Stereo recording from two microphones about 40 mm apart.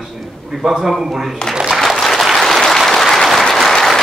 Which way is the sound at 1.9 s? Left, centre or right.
Centre.